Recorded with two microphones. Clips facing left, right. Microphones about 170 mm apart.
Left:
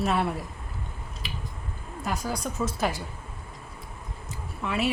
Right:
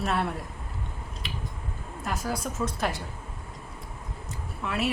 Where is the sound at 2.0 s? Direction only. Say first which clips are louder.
Left 1 dB; centre (ahead or behind).